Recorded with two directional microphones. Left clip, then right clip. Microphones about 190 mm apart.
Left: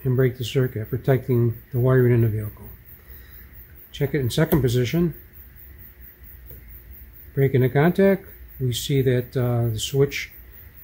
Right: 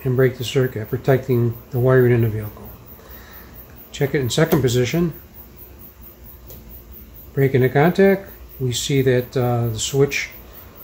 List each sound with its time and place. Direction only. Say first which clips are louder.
0.1 s speech: right 4 dB; 35° left (ahead or behind)
3.9 s speech: right 4 dB; 35° left (ahead or behind)
7.3 s speech: right 4 dB; 35° left (ahead or behind)